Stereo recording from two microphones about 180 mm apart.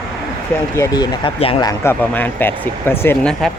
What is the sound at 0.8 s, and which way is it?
Speech, 25° left (ahead or behind).